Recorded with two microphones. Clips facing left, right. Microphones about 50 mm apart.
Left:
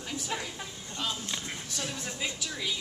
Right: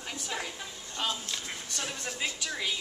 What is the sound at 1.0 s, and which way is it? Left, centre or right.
Speech, centre.